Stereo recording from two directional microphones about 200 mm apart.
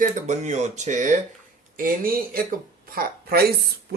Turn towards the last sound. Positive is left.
turn(degrees=-50)  # may be behind; listen again after turning